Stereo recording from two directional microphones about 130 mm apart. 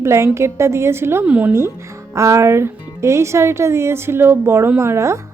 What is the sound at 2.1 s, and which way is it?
Speech, 25° right (ahead or behind).